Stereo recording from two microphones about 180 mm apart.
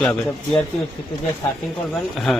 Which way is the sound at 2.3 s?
Centre (ahead or behind).